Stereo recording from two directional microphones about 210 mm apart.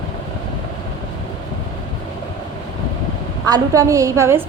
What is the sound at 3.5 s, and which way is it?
Speech, 15° right (ahead or behind).